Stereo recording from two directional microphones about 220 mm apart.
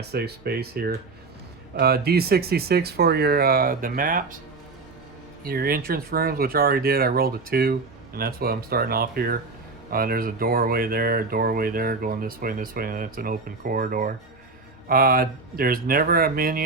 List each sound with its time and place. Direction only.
0.1 s speech: 45° right (ahead or behind)
5.5 s speech: 40° right (ahead or behind)